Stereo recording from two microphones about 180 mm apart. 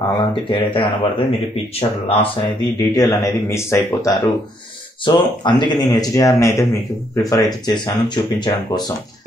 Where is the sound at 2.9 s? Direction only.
20° left (ahead or behind).